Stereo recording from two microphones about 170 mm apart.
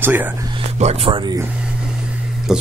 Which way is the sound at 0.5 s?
40° right (ahead or behind).